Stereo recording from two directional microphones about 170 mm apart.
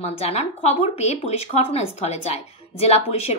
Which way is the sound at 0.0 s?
40° left (ahead or behind).